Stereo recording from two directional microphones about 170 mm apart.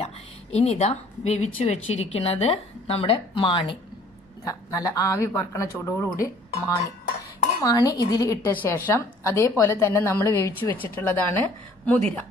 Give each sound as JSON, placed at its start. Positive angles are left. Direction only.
{"t": 0.0, "sound": "a woman's voice", "side_deg": 40}
{"t": 7.6, "sound": "a woman's voice", "side_deg": 20}